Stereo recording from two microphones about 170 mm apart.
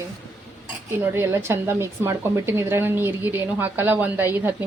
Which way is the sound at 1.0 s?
15° right (ahead or behind).